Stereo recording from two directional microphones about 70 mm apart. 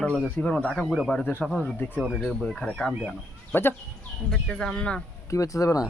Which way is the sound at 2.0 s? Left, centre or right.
Centre.